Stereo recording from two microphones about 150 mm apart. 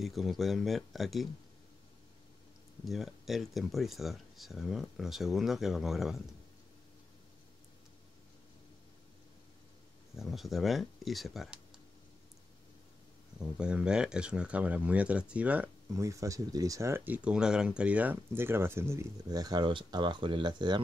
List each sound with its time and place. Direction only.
0.0 s speech: centre (ahead or behind)
2.8 s speech: centre (ahead or behind)
10.1 s speech: centre (ahead or behind)
13.4 s speech: 5° right (ahead or behind)
15.9 s speech: 20° right (ahead or behind)